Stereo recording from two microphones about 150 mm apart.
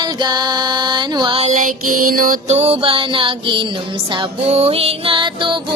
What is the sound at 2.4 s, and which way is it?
Music, 45° right (ahead or behind).